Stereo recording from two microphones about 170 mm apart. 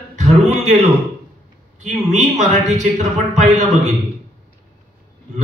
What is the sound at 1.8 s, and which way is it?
A man's voice, 45° right (ahead or behind).